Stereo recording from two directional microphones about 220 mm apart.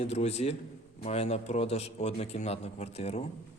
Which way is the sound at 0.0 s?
30° left (ahead or behind).